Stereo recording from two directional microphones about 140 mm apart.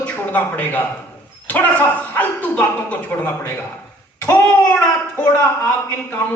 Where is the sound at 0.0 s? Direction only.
10° left (ahead or behind).